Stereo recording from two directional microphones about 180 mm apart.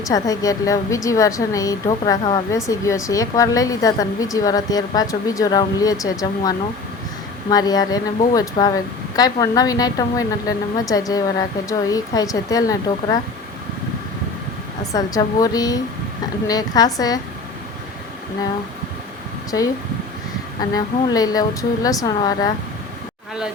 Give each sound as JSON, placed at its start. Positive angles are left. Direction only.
{"t": 0.0, "sound": "speech", "side_deg": 20}
{"t": 7.5, "sound": "speech", "side_deg": 20}
{"t": 14.9, "sound": "speech", "side_deg": 20}
{"t": 19.5, "sound": "speech", "side_deg": 20}